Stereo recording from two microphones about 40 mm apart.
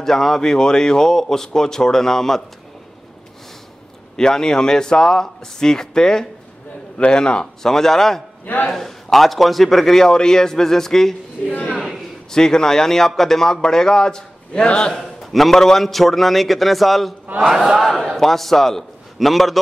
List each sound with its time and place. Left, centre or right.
0.0 s a man's voice: centre
4.2 s a man's voice: centre
7.6 s a man's voice: centre
12.3 s a man's voice: centre
15.0 s a man's voice: centre